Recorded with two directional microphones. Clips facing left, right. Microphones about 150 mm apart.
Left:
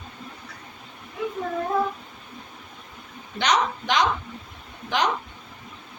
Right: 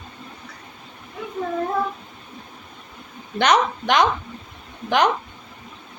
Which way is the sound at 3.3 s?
55° right (ahead or behind).